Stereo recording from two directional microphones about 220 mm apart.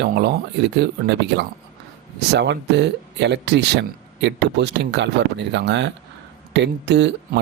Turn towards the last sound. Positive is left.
turn(degrees=-50)  # may be behind; listen again after turning